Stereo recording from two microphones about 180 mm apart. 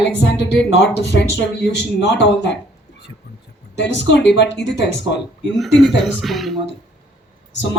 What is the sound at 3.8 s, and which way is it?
A woman's voice, 75° left (ahead or behind).